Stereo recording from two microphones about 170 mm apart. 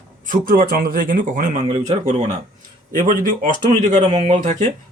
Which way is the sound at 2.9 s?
55° right (ahead or behind).